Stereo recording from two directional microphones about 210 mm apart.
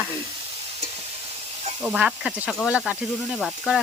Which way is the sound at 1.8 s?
5° right (ahead or behind).